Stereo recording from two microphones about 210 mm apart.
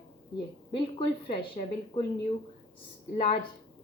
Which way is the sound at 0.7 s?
25° left (ahead or behind).